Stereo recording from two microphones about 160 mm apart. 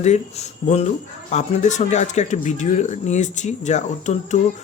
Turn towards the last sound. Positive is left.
turn(degrees=45)  # may be behind; listen again after turning